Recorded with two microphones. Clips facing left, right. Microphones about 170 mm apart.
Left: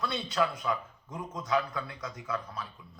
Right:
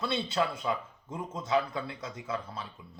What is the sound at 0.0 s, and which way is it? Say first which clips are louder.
A man's voice: even; 25° right (ahead or behind).